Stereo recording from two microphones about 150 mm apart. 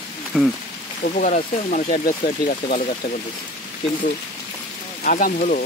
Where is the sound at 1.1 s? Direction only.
60° left (ahead or behind).